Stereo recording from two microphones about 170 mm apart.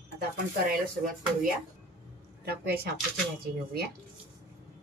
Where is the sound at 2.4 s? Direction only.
65° right (ahead or behind).